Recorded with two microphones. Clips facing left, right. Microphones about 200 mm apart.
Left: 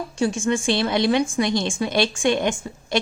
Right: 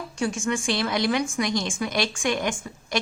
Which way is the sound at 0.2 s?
30° left (ahead or behind).